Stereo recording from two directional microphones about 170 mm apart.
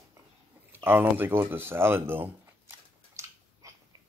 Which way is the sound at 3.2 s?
15° right (ahead or behind).